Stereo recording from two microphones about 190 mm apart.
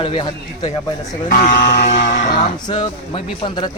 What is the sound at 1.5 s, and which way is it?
Music, 65° left (ahead or behind).